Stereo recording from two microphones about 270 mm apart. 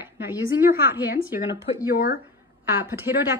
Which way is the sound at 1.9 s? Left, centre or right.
Left.